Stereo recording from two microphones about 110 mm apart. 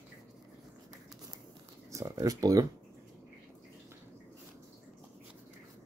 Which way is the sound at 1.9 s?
30° right (ahead or behind).